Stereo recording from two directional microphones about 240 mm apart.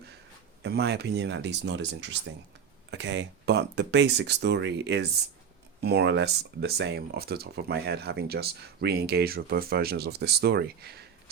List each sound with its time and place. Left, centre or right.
0.6 s speech: right